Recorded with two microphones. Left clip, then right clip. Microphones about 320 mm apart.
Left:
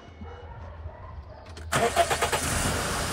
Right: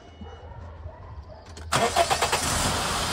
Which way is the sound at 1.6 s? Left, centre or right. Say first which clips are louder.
Right 1 dB; centre.